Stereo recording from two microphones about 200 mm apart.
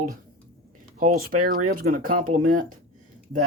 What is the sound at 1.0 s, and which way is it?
Speech, 40° right (ahead or behind).